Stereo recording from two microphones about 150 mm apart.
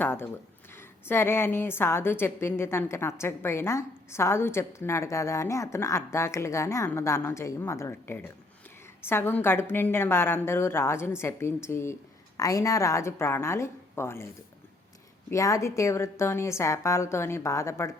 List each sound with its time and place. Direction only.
0.0 s a woman's voice: 15° left (ahead or behind)
15.3 s a woman's voice: 20° left (ahead or behind)